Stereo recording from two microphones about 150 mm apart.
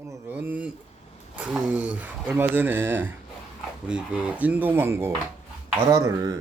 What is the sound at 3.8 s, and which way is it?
Speech, 5° right (ahead or behind).